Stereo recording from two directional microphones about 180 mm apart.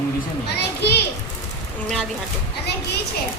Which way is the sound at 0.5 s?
65° left (ahead or behind).